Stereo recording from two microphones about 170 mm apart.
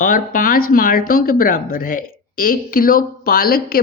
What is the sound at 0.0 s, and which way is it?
Speech, 55° left (ahead or behind).